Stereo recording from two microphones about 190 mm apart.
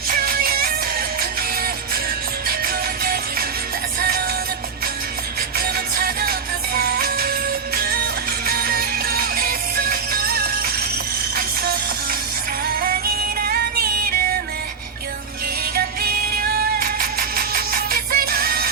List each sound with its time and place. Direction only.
0.1 s music: 50° right (ahead or behind)
5.5 s music: 50° right (ahead or behind)
13.4 s music: 55° right (ahead or behind)
15.7 s music: 50° right (ahead or behind)